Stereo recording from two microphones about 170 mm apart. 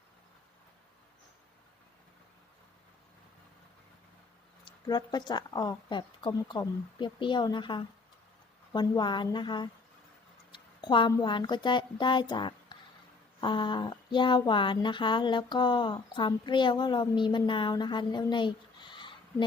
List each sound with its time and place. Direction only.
4.6 s speech: 25° left (ahead or behind)